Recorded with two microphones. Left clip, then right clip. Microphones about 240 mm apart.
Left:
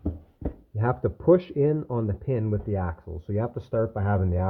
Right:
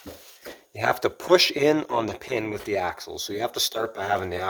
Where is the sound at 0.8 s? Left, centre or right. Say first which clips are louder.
Right 4 dB; right.